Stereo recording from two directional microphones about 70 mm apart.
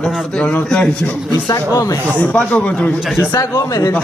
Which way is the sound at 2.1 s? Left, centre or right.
Left.